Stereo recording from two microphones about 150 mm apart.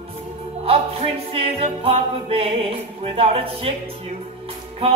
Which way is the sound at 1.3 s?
40° right (ahead or behind).